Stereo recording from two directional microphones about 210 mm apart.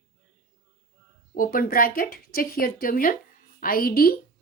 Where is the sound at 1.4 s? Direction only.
45° left (ahead or behind).